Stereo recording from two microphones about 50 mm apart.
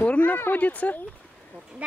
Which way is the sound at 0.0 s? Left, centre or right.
Left.